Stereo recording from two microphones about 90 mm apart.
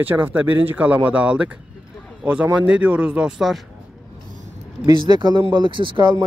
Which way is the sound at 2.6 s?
15° right (ahead or behind).